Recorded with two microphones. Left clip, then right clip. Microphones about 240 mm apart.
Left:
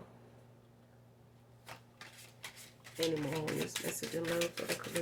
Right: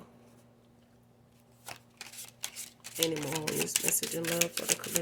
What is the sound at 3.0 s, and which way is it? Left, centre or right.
Speech, right.